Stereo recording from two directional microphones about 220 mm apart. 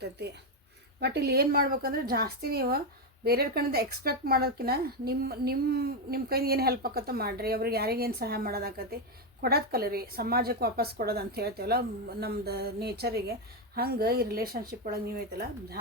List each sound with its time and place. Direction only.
0.9 s speech: 45° right (ahead or behind)